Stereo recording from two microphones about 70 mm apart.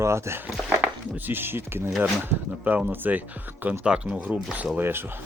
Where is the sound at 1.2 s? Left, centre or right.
Right.